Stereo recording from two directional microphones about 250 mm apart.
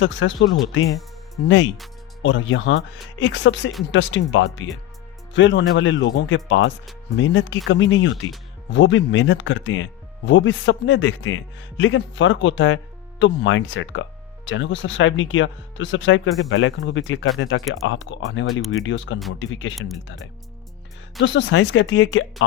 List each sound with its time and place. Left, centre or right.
0.0 s speech: left
21.2 s speech: left